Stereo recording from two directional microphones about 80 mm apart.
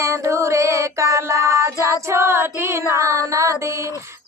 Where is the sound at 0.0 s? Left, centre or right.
Right.